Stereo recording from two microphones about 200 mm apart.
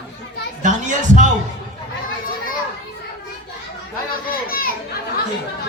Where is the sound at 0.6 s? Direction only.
40° right (ahead or behind).